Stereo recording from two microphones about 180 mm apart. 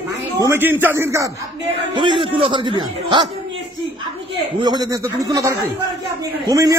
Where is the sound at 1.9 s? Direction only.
25° right (ahead or behind).